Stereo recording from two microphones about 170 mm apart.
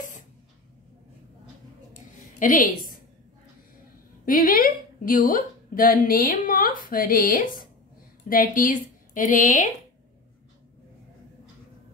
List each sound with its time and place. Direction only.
2.3 s a woman's voice: 50° left (ahead or behind)
4.3 s a woman's voice: 55° left (ahead or behind)